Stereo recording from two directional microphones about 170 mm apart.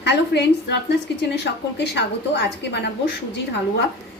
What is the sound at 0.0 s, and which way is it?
A woman's voice, 90° left.